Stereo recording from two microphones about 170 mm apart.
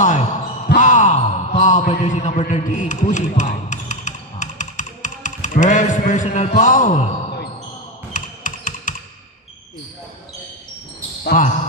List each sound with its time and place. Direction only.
0.0 s a sound: 45° left (ahead or behind)
8.1 s computer keyboard: 50° left (ahead or behind)
11.2 s speech: 50° left (ahead or behind)